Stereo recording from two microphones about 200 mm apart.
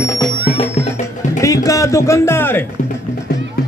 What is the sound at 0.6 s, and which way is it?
Music, 35° left (ahead or behind).